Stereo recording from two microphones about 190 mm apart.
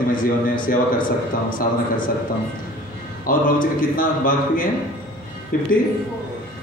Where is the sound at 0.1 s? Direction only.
45° left (ahead or behind).